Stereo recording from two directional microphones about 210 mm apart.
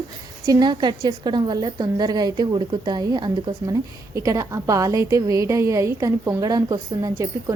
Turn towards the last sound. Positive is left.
turn(degrees=-15)  # may be behind; listen again after turning